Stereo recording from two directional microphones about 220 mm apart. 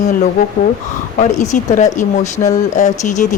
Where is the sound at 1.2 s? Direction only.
35° left (ahead or behind).